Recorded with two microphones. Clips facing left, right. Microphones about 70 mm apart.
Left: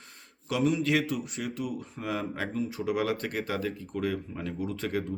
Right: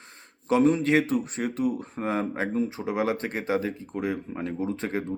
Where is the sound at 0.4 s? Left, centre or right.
Right.